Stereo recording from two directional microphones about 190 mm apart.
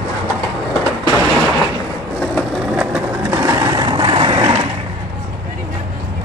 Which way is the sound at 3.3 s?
15° right (ahead or behind).